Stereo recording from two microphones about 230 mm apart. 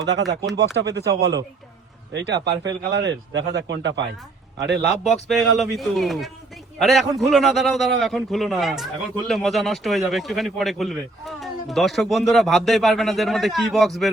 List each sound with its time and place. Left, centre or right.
0.0 s a man's voice: right
5.3 s a man's voice: centre